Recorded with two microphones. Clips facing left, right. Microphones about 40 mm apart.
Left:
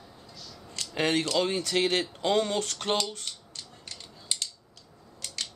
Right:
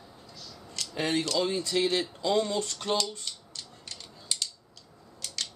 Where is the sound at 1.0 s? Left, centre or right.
Left.